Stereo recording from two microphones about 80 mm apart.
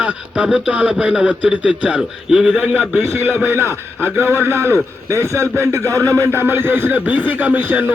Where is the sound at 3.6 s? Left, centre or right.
Left.